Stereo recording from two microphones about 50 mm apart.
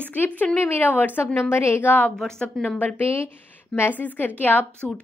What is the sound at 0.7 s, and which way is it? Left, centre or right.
Speech, left.